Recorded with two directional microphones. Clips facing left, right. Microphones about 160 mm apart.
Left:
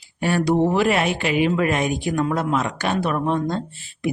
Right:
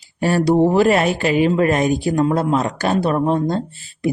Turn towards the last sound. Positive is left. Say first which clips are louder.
# right 4 dB
turn(degrees=-35)  # may be behind; listen again after turning